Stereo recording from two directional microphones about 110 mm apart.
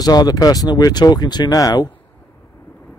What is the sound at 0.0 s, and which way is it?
Speech, 35° left (ahead or behind).